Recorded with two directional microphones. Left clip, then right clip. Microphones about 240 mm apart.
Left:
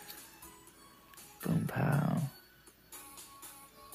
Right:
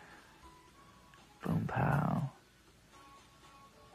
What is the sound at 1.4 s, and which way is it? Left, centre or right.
Music, centre.